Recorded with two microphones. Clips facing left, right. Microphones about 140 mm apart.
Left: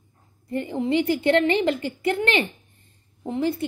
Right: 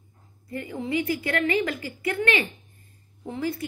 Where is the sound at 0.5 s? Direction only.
25° left (ahead or behind).